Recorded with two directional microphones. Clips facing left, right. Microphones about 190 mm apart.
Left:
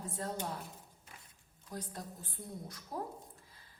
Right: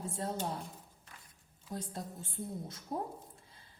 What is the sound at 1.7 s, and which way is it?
A woman's voice, 25° right (ahead or behind).